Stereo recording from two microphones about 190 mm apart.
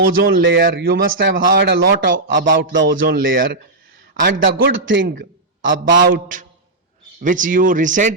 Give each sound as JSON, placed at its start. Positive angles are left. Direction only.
{"t": 0.4, "sound": "speech", "side_deg": -60}
{"t": 2.9, "sound": "speech", "side_deg": -50}
{"t": 4.7, "sound": "a man's voice", "side_deg": -75}
{"t": 5.6, "sound": "speech", "side_deg": -55}